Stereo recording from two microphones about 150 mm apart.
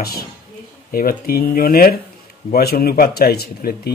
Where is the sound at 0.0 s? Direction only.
90° left.